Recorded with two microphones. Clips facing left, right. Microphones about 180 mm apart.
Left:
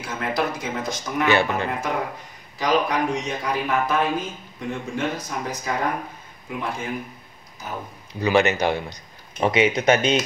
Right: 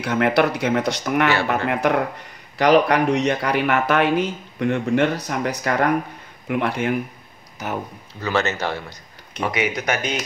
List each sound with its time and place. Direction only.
0.0 s speech: 70° right (ahead or behind)
8.1 s a man's voice: 15° left (ahead or behind)